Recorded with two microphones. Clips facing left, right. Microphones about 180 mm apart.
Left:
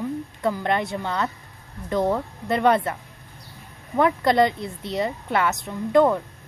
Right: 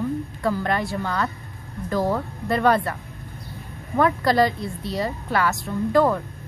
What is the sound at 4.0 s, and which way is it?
A woman's voice, 20° left (ahead or behind).